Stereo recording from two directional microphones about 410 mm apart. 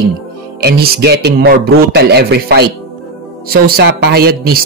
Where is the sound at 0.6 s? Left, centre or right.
Right.